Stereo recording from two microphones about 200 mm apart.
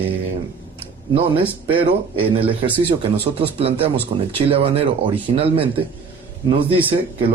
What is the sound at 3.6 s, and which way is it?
Speech, 30° right (ahead or behind).